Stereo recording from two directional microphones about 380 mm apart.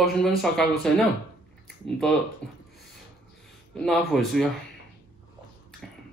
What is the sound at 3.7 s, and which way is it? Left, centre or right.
Speech, centre.